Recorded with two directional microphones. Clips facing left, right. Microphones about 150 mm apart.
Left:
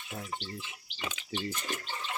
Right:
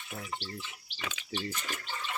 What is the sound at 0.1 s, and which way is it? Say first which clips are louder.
Speech: even; 20° left (ahead or behind).